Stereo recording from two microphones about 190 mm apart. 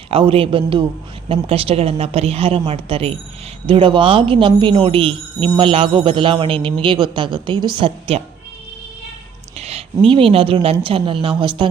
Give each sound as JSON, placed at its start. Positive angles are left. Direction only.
{"t": 0.1, "sound": "a woman's voice", "side_deg": -30}
{"t": 9.6, "sound": "speech", "side_deg": -35}